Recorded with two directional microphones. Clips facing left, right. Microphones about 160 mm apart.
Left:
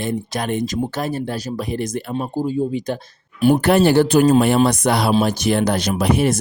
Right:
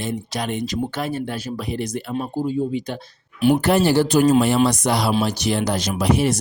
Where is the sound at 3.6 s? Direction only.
65° left (ahead or behind).